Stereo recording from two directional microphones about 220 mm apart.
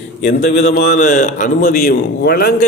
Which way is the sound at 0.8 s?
40° left (ahead or behind).